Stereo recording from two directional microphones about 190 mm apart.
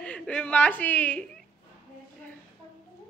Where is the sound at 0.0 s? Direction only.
5° left (ahead or behind).